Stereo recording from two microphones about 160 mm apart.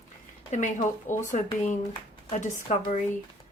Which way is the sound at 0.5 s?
50° left (ahead or behind).